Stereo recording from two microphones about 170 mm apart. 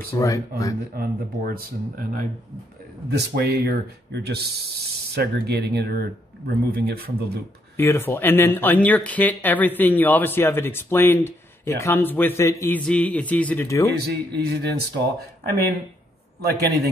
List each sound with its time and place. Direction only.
0.2 s speech: 20° left (ahead or behind)
0.9 s speech: 60° right (ahead or behind)
3.1 s speech: 75° right (ahead or behind)
7.7 s speech: 15° left (ahead or behind)
14.0 s speech: 70° right (ahead or behind)